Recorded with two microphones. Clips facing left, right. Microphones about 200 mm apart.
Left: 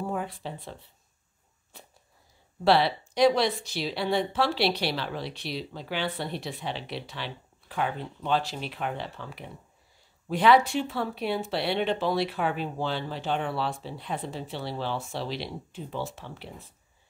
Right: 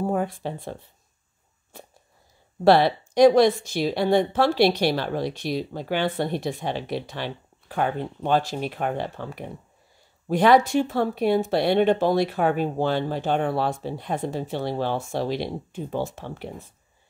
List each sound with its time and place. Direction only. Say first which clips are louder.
0.0 s speech: right 7 dB; 45° right (ahead or behind)
2.6 s a woman's voice: right 5 dB; 50° right (ahead or behind)